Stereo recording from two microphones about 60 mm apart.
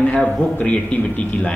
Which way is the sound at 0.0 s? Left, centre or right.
Left.